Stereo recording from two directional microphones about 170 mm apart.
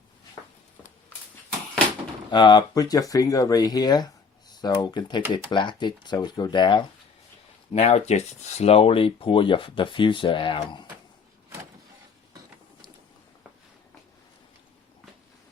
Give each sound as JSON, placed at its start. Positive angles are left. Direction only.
{"t": 2.3, "sound": "speech", "side_deg": 25}
{"t": 7.7, "sound": "speech", "side_deg": 40}